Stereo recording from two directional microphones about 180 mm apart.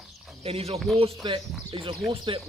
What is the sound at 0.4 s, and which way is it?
Speech, 35° right (ahead or behind).